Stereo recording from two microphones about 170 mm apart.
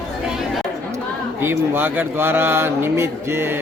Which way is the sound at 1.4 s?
10° right (ahead or behind).